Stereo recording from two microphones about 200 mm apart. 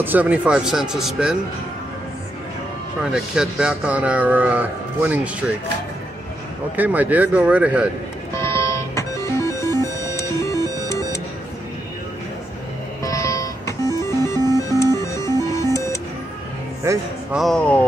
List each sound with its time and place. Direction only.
0.0 s speech: 10° right (ahead or behind)
3.0 s speech: 5° right (ahead or behind)
6.8 s speech: 10° right (ahead or behind)
8.4 s music: 15° left (ahead or behind)
13.0 s music: 15° left (ahead or behind)
16.8 s speech: 15° right (ahead or behind)
17.4 s speech: centre (ahead or behind)